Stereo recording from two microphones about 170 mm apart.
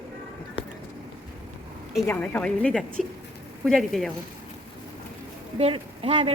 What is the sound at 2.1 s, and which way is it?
A woman's voice, 10° left (ahead or behind).